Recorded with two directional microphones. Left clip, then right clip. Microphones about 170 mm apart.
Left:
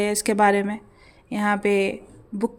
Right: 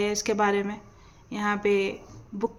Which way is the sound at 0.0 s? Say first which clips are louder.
Left 5 dB; 35° left (ahead or behind).